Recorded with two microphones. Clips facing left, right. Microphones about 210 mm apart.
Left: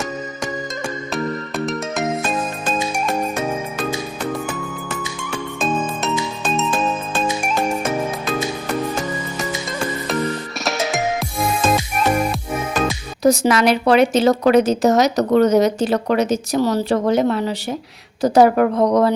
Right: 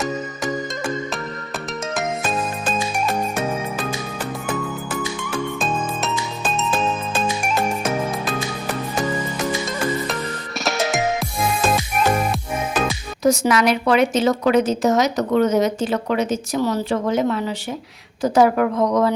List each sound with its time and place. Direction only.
6.6 s music: centre (ahead or behind)
10.6 s music: centre (ahead or behind)
13.2 s a woman's voice: 35° left (ahead or behind)